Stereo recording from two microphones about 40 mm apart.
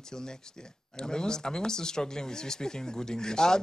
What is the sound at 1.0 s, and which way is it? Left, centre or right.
Speech, centre.